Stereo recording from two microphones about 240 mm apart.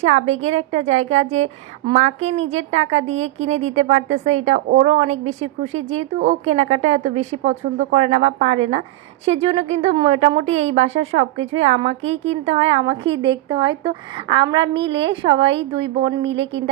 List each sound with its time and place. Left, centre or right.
0.0 s a woman's voice: right